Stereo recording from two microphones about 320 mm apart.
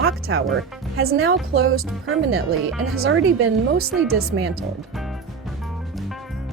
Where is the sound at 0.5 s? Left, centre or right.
Right.